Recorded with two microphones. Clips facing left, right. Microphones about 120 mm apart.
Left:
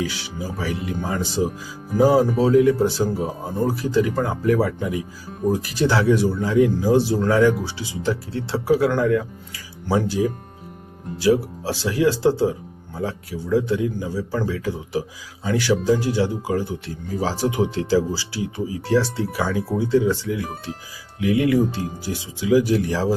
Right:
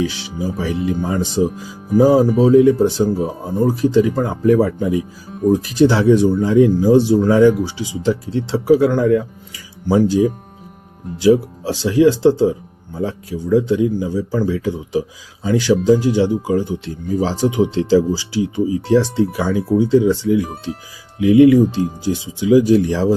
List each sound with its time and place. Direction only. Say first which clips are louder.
0.0 s speech: right 6 dB; 25° right (ahead or behind)